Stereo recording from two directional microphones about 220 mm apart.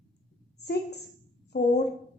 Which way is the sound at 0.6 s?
50° left (ahead or behind).